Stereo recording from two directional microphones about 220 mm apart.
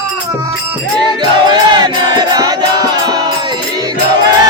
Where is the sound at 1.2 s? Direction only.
20° right (ahead or behind).